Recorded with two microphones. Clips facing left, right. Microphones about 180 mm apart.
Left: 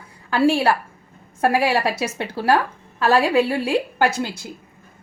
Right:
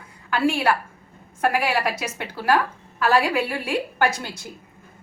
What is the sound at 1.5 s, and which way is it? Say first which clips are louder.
Speech: left 3 dB; 30° left (ahead or behind).